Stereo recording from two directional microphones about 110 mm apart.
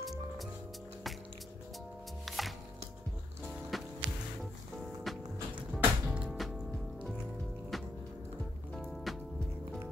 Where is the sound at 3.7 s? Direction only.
Centre (ahead or behind).